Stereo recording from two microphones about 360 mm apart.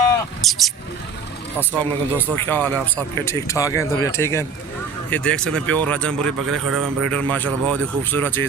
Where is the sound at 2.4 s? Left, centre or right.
Centre.